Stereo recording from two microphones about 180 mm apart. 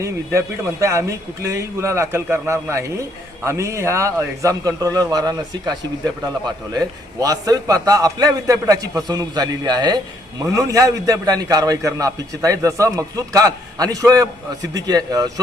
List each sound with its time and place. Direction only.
0.0 s a man's voice: 15° right (ahead or behind)